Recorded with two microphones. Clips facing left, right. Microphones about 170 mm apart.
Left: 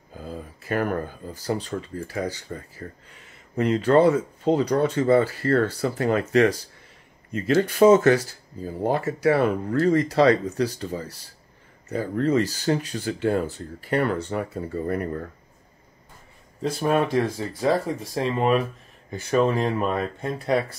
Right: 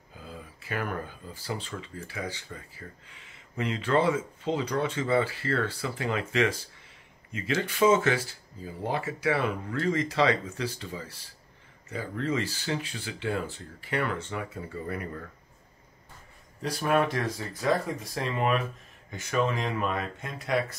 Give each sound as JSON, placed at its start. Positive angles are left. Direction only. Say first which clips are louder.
{"t": 0.1, "sound": "speech", "louder": "left 8 dB", "side_deg": 40}
{"t": 16.6, "sound": "speech", "louder": "left 4 dB", "side_deg": 25}